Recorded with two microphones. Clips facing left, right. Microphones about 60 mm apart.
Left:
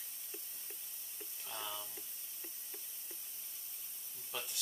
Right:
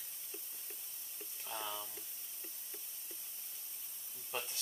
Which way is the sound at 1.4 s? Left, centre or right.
Centre.